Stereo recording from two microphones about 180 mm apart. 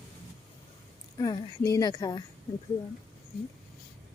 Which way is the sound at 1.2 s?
20° left (ahead or behind).